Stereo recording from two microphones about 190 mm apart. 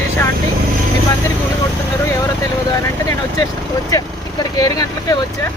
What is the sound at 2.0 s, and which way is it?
Speech, 15° left (ahead or behind).